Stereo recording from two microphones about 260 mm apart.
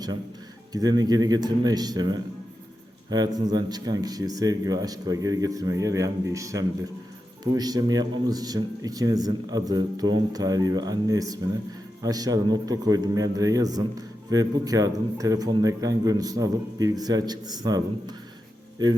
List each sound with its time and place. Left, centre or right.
0.7 s speech: centre